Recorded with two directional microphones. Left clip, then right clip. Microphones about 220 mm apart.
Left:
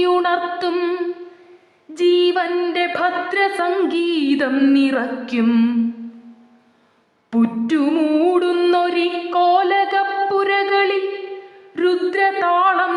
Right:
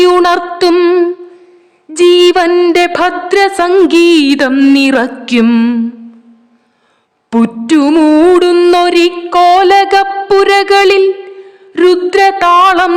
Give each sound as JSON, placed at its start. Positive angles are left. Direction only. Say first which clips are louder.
{"t": 0.0, "sound": "music", "louder": "right 9 dB", "side_deg": -50}
{"t": 7.3, "sound": "music", "louder": "right 9 dB", "side_deg": -50}